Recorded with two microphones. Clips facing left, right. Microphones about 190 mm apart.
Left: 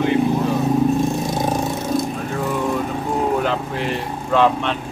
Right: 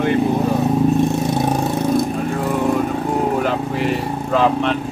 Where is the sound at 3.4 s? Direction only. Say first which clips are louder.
Right 3 dB; 5° right (ahead or behind).